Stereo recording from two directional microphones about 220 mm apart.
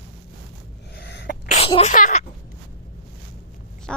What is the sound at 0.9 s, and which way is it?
Sneeze, 50° left (ahead or behind).